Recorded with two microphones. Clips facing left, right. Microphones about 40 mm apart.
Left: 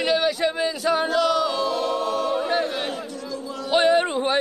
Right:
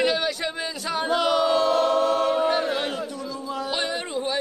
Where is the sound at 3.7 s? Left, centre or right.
Left.